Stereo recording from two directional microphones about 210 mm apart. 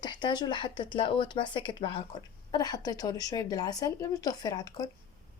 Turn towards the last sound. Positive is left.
turn(degrees=20)  # may be behind; listen again after turning